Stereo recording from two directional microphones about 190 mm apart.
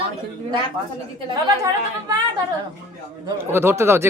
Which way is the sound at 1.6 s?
15° right (ahead or behind).